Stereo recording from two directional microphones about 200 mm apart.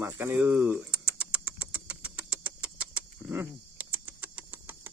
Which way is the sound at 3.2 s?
10° right (ahead or behind).